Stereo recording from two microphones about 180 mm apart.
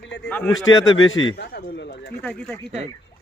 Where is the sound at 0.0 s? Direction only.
75° left (ahead or behind).